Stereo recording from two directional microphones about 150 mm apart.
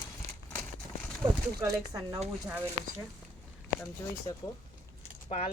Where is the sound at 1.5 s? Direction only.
20° right (ahead or behind).